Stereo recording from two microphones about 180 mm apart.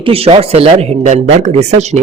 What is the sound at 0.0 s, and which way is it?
Speech, 30° right (ahead or behind).